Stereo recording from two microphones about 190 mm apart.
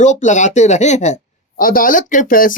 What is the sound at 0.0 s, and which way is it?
Speech, 40° left (ahead or behind).